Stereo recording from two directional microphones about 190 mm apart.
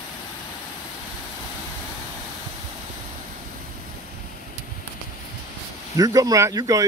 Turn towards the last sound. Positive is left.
turn(degrees=-20)  # may be behind; listen again after turning